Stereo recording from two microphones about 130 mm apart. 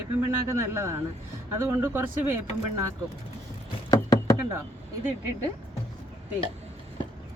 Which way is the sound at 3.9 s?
25° left (ahead or behind).